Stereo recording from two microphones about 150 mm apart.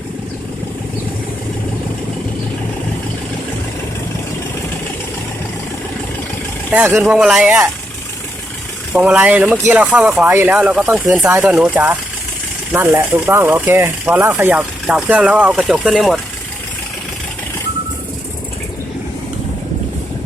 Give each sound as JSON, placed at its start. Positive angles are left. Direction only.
{"t": 6.7, "sound": "speech", "side_deg": -10}
{"t": 8.9, "sound": "speech", "side_deg": -5}
{"t": 14.8, "sound": "speech", "side_deg": -5}